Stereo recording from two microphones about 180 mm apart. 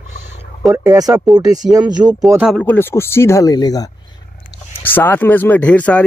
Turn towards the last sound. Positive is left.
turn(degrees=10)  # may be behind; listen again after turning